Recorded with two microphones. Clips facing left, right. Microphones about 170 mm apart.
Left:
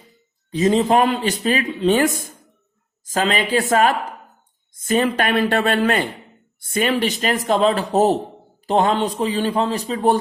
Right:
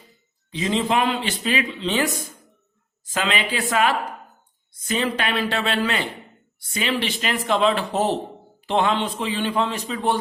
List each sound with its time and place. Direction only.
0.5 s a man's voice: 45° left (ahead or behind)